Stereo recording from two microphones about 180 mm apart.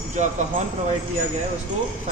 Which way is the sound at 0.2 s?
40° right (ahead or behind).